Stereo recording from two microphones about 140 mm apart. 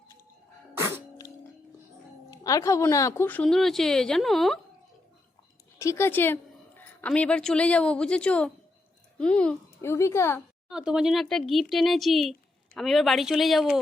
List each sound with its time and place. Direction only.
0.8 s music: 20° right (ahead or behind)
2.3 s speech: 25° left (ahead or behind); by 4.6 s centre (ahead or behind)
5.8 s a woman's voice: 20° left (ahead or behind)
10.7 s speech: 5° right (ahead or behind)